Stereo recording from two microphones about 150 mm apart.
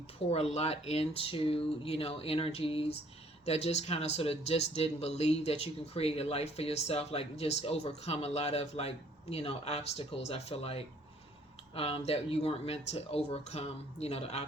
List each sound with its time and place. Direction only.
0.2 s speech: 40° left (ahead or behind)